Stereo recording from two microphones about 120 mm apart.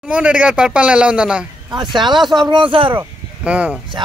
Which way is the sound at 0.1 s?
10° right (ahead or behind).